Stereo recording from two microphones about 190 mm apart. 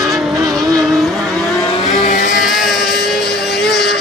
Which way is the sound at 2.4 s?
Centre (ahead or behind).